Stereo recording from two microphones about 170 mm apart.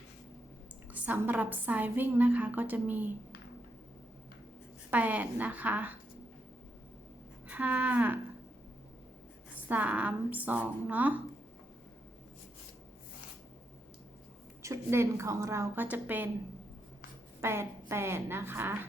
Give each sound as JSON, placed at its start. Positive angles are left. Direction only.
{"t": 1.0, "sound": "a woman's voice", "side_deg": -10}
{"t": 4.9, "sound": "a woman's voice", "side_deg": -10}
{"t": 7.4, "sound": "speech", "side_deg": -10}
{"t": 9.6, "sound": "a woman's voice", "side_deg": -10}
{"t": 14.6, "sound": "a woman's voice", "side_deg": -15}
{"t": 17.4, "sound": "a woman's voice", "side_deg": -15}